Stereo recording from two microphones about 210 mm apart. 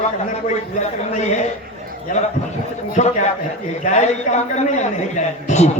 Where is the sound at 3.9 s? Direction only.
35° left (ahead or behind).